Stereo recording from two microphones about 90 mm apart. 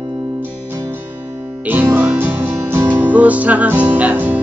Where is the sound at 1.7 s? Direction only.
20° right (ahead or behind).